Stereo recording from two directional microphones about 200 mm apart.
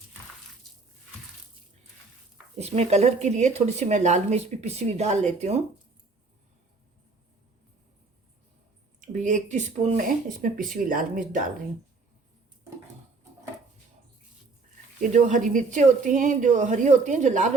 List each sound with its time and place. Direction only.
2.6 s speech: 30° right (ahead or behind)
9.0 s speech: 40° right (ahead or behind)
15.1 s speech: 40° right (ahead or behind)